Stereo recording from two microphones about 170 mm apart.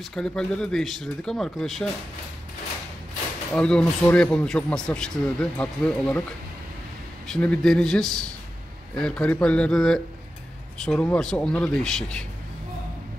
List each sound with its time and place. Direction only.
0.1 s a man's voice: 5° left (ahead or behind)
3.5 s a man's voice: 5° left (ahead or behind)
7.2 s a man's voice: 5° left (ahead or behind)